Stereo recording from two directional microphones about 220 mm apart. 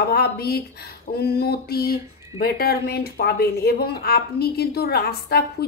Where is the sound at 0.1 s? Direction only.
45° left (ahead or behind).